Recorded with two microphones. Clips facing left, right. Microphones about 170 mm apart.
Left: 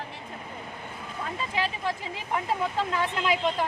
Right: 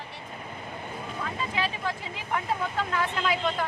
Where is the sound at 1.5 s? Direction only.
25° left (ahead or behind).